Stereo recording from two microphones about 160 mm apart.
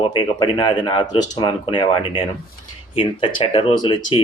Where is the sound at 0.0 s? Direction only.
30° left (ahead or behind).